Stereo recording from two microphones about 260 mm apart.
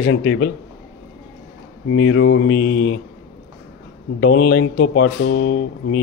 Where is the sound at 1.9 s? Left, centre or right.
Left.